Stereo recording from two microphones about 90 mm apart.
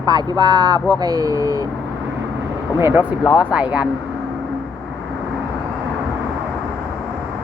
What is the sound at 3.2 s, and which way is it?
Speech, 55° left (ahead or behind).